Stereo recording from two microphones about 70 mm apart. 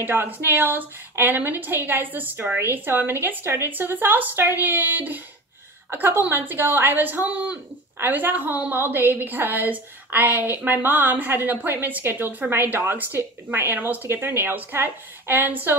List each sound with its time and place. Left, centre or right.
0.0 s a woman's voice: right